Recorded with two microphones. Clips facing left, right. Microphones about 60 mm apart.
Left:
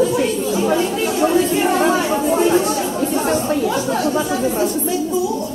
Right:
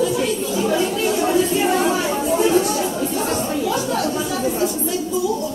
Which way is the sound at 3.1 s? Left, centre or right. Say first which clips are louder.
Left 4 dB; left.